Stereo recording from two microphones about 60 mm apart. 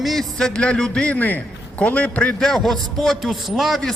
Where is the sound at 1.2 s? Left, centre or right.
Left.